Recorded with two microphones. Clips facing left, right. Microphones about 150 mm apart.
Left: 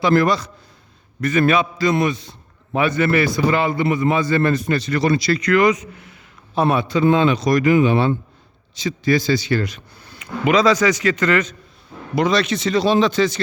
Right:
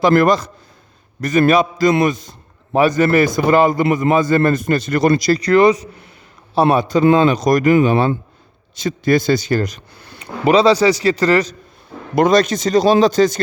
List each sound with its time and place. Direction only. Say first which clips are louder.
0.0 s a man's voice: right 4 dB; 45° right (ahead or behind)
12.1 s a man's voice: right 5 dB; 50° right (ahead or behind)